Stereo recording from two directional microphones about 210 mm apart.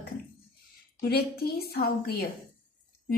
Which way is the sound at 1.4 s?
45° left (ahead or behind).